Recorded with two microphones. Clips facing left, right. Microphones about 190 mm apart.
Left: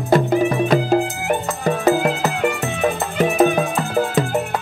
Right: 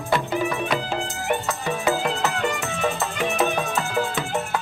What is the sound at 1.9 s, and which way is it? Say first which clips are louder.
Music: left 5 dB; 40° left (ahead or behind).